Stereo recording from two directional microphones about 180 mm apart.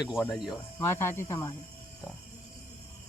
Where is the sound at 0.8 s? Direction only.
15° left (ahead or behind).